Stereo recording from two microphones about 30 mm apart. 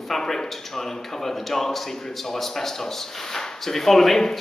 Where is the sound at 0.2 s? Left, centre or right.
Left.